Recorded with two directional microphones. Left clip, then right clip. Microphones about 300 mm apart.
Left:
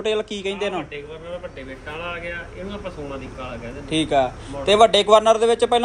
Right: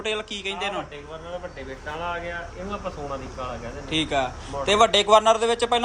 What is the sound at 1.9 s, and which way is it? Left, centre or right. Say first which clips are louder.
Speech: even; centre.